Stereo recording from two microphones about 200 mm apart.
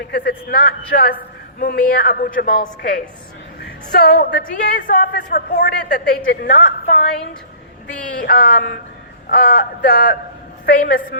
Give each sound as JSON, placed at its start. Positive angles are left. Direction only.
{"t": 0.1, "sound": "a woman's voice", "side_deg": 55}
{"t": 8.2, "sound": "a woman's voice", "side_deg": 45}